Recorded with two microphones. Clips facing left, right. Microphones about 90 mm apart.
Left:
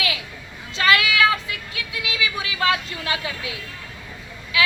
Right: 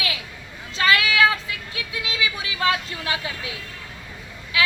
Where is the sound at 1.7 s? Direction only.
30° right (ahead or behind).